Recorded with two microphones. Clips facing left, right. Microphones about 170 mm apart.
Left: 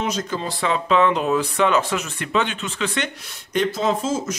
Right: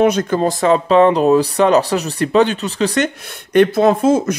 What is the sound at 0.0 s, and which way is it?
Speech, 60° right (ahead or behind).